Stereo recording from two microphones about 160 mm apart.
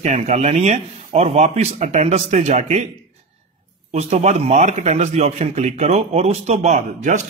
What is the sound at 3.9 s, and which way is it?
A man's voice, 45° right (ahead or behind).